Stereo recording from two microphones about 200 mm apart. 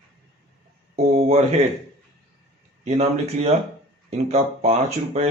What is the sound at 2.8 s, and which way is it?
Speech, 35° right (ahead or behind).